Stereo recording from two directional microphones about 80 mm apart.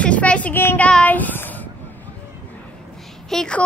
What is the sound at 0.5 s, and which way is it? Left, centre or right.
Speech, left.